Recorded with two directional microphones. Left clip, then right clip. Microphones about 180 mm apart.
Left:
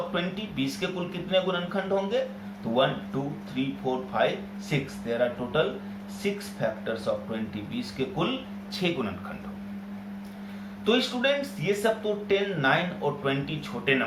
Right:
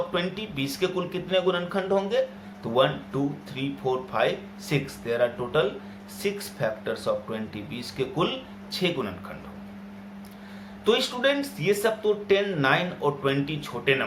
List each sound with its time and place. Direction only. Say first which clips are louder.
0.1 s speech: right 2 dB; 40° right (ahead or behind)
3.5 s speech: left 1 dB; 45° right (ahead or behind)
8.8 s speech: right 2 dB; 30° right (ahead or behind)
10.8 s speech: right 2 dB; 35° right (ahead or behind)